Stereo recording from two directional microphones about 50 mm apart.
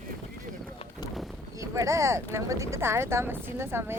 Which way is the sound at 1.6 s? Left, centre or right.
Right.